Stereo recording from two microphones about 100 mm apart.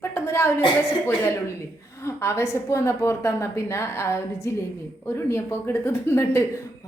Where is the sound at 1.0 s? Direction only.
25° left (ahead or behind).